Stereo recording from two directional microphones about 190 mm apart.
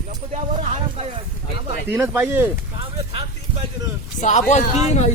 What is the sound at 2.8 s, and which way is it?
Speech, 30° right (ahead or behind).